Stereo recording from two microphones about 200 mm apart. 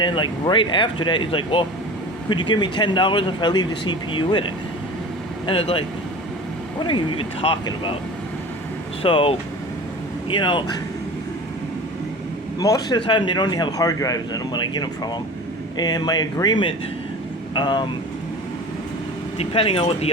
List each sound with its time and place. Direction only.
0.0 s speech: 25° left (ahead or behind)
9.0 s speech: 25° left (ahead or behind)
12.5 s speech: 20° left (ahead or behind)
19.4 s speech: 30° left (ahead or behind)